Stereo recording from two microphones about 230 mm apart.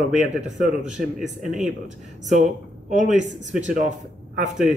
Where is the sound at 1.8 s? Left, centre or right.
Right.